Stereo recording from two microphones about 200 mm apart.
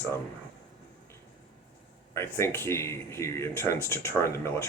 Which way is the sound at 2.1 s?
15° left (ahead or behind).